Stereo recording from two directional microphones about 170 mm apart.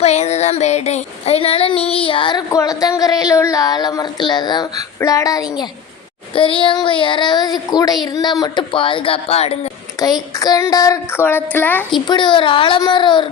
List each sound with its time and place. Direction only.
0.0 s child singing: 40° left (ahead or behind)
10.0 s speech: 20° left (ahead or behind)
12.0 s child singing: 25° left (ahead or behind)